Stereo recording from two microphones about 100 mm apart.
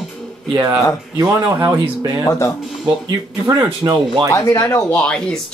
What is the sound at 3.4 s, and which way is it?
Speech, 40° right (ahead or behind).